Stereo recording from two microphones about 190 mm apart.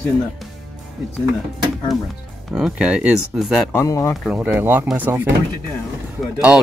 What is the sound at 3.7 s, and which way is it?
Speech, 15° left (ahead or behind).